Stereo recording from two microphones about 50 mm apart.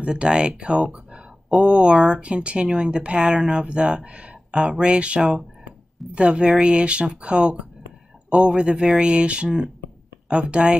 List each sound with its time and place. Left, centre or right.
0.0 s speech: centre